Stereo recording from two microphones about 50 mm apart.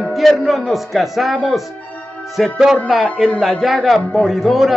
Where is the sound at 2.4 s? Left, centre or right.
Centre.